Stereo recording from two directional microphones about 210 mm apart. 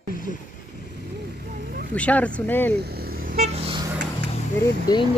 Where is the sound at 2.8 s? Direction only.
50° right (ahead or behind).